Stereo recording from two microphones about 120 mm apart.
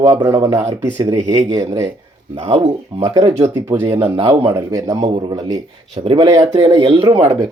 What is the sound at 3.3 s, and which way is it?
Speech, 20° right (ahead or behind).